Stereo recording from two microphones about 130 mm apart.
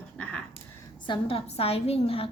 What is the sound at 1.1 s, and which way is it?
A woman's voice, 45° left (ahead or behind).